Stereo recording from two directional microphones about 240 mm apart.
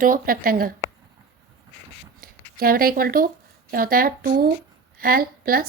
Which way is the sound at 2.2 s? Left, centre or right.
Right.